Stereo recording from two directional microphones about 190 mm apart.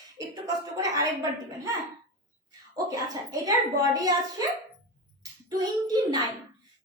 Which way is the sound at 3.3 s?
20° right (ahead or behind).